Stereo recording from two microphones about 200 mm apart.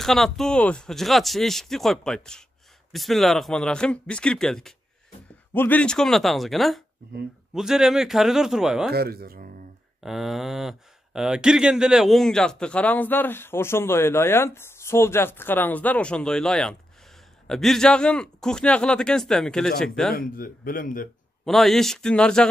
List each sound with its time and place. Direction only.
0.0 s speech: centre (ahead or behind)
8.9 s speech: 50° right (ahead or behind)
10.0 s speech: centre (ahead or behind)
20.2 s speech: 45° left (ahead or behind)
21.5 s speech: centre (ahead or behind)